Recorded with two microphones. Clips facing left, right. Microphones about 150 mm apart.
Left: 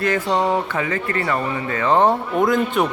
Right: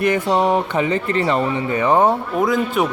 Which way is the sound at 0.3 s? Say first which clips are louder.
Right 3 dB; 20° right (ahead or behind).